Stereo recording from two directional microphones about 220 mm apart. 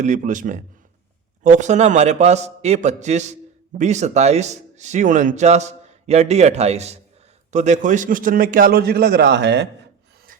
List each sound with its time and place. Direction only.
0.0 s speech: 35° right (ahead or behind); by 9.6 s 50° right (ahead or behind)